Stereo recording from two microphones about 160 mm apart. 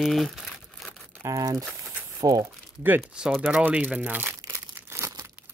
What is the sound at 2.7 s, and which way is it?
Speech, 10° right (ahead or behind).